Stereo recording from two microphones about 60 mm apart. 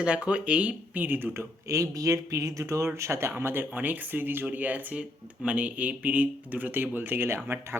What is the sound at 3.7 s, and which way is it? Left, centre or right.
Speech, right.